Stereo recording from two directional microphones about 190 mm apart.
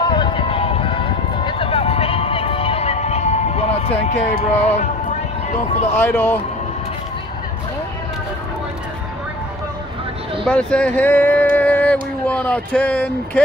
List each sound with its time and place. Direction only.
0.0 s music: 25° left (ahead or behind)
5.9 s speech: 10° left (ahead or behind)
10.4 s speech: 5° left (ahead or behind)
11.5 s a sound: 10° left (ahead or behind)